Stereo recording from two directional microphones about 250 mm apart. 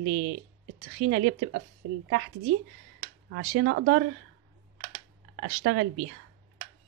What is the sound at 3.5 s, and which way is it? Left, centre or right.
Speech, right.